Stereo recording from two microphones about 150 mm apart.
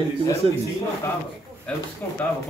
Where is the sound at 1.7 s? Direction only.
5° left (ahead or behind).